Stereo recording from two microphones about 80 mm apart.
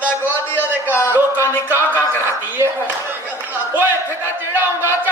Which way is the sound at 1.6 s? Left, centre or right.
Right.